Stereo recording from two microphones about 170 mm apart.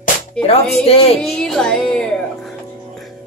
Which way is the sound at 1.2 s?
5° left (ahead or behind).